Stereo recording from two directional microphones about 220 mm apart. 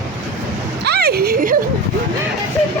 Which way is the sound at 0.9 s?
45° right (ahead or behind).